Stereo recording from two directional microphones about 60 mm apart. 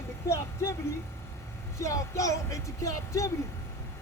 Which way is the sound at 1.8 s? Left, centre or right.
Left.